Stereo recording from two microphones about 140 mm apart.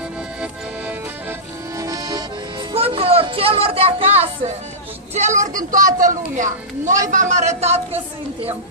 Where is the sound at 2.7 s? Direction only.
40° right (ahead or behind).